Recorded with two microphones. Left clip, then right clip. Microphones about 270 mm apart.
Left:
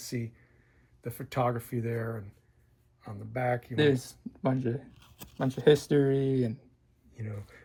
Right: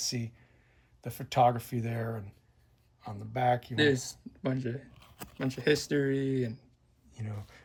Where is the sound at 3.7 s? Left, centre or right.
Centre.